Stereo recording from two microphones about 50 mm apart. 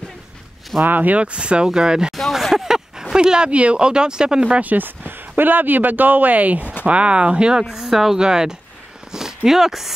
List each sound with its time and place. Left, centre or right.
0.7 s speech: right
6.6 s a sound: left
6.9 s speech: right
7.6 s a woman's voice: centre